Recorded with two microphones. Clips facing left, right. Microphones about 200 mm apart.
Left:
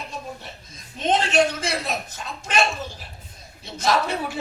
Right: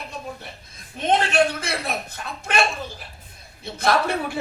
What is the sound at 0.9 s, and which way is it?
Speech, 60° right (ahead or behind).